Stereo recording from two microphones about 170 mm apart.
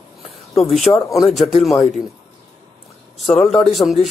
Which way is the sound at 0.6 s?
Centre (ahead or behind).